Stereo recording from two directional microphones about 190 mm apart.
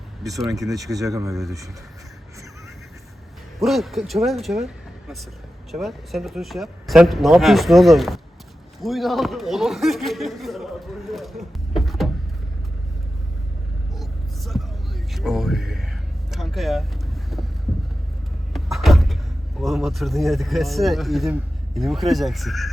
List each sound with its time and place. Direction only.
0.3 s speech: centre (ahead or behind)
0.5 s speech: 15° right (ahead or behind)
3.6 s speech: centre (ahead or behind)
14.0 s vehicle: centre (ahead or behind)
18.5 s vehicle: centre (ahead or behind)
19.5 s speech: centre (ahead or behind)